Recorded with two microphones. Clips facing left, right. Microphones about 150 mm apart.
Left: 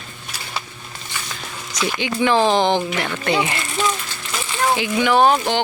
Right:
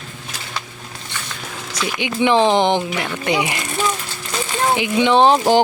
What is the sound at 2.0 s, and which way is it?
Speech, 20° right (ahead or behind).